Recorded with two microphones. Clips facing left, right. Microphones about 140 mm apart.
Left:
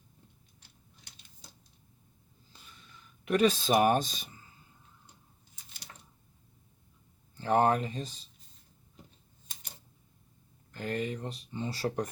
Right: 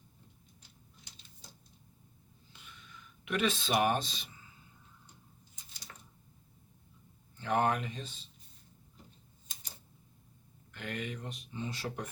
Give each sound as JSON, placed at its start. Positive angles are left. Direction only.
{"t": 2.5, "sound": "snort", "side_deg": 35}
{"t": 3.2, "sound": "speech", "side_deg": 40}
{"t": 7.3, "sound": "speech", "side_deg": 35}
{"t": 10.7, "sound": "speech", "side_deg": 35}